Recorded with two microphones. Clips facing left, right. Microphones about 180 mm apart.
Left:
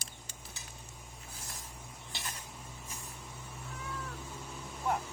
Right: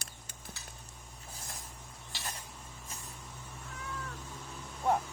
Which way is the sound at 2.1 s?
20° left (ahead or behind).